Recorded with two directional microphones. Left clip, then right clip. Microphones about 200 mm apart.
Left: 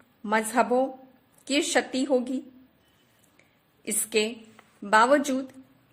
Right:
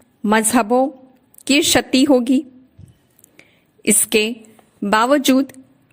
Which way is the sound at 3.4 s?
45° right (ahead or behind).